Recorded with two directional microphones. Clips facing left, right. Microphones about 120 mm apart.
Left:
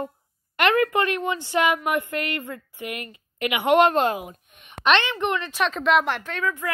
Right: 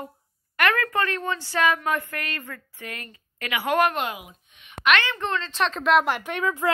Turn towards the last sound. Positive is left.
turn(degrees=-15)  # may be behind; listen again after turning